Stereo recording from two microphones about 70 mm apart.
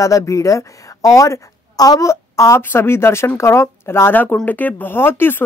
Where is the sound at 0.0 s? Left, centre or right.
Left.